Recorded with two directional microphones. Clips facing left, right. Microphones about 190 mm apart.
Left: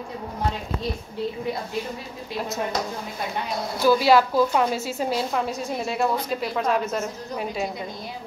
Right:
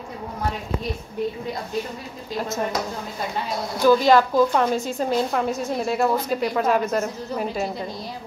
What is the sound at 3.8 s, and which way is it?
A woman's voice, 5° left (ahead or behind).